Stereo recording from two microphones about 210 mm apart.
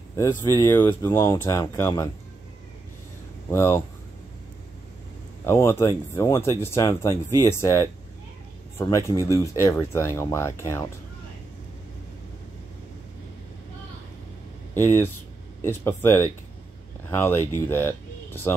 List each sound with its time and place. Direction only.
0.2 s speech: 15° left (ahead or behind)
3.4 s speech: 10° left (ahead or behind)
5.4 s speech: 15° left (ahead or behind)
14.7 s speech: 10° left (ahead or behind)